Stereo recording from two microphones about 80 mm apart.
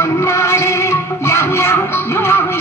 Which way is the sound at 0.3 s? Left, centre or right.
Left.